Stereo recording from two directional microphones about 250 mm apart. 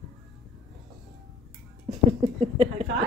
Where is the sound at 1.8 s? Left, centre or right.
Right.